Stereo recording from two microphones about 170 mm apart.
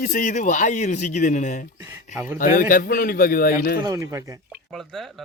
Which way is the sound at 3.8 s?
20° right (ahead or behind).